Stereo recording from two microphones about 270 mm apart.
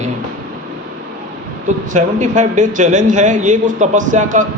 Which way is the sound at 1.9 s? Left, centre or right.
Right.